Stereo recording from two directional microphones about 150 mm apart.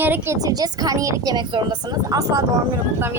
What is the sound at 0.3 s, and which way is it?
Speech, 25° right (ahead or behind).